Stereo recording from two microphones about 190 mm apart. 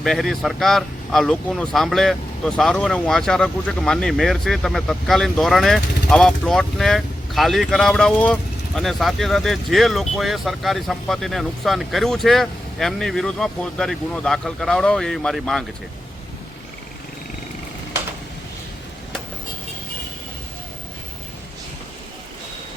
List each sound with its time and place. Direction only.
0.0 s speech: centre (ahead or behind)